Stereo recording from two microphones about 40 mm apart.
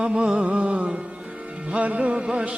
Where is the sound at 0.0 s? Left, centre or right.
Right.